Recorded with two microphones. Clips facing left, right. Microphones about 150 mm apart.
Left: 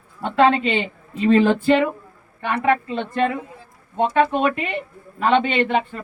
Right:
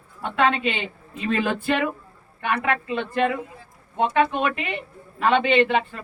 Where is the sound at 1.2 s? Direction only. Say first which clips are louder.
Left 8 dB; 30° left (ahead or behind).